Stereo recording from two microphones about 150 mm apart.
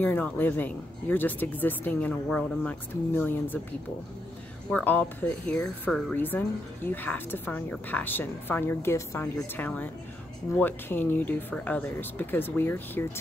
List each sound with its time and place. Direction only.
0.0 s a woman's voice: 10° left (ahead or behind)
4.6 s a woman's voice: 10° left (ahead or behind)
6.1 s a woman's voice: 15° left (ahead or behind)